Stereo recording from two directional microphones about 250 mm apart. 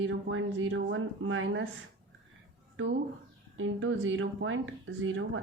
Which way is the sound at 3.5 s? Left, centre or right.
Right.